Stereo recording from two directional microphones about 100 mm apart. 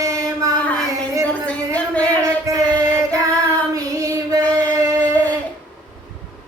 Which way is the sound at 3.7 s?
35° right (ahead or behind).